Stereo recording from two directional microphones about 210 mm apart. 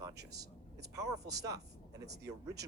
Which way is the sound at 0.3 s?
15° right (ahead or behind).